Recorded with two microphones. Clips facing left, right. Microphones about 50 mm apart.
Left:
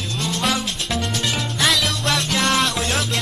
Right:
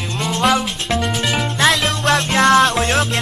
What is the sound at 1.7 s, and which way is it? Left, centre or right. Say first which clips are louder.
Music: right 5 dB; right.